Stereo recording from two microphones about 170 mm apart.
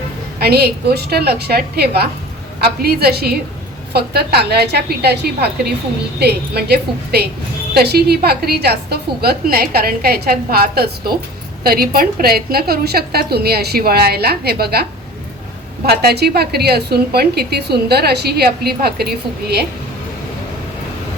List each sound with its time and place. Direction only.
0.3 s a woman's voice: 65° right (ahead or behind)
15.9 s a woman's voice: 70° right (ahead or behind)